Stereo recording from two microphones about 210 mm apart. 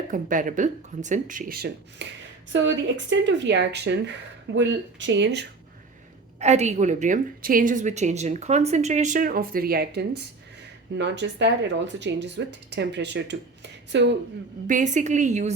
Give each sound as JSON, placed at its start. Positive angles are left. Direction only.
{"t": 0.1, "sound": "a woman's voice", "side_deg": -40}
{"t": 2.5, "sound": "speech", "side_deg": -60}
{"t": 6.4, "sound": "a woman's voice", "side_deg": -35}
{"t": 14.7, "sound": "a woman's voice", "side_deg": -35}